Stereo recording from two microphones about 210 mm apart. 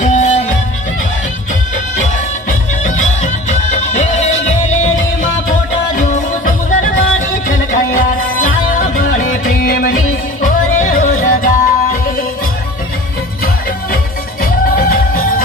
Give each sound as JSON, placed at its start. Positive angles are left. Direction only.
{"t": 0.0, "sound": "music", "side_deg": 35}
{"t": 2.5, "sound": "music", "side_deg": 35}
{"t": 14.4, "sound": "music", "side_deg": 45}